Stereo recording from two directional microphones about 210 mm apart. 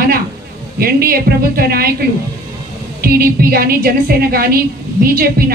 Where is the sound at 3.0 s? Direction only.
45° right (ahead or behind).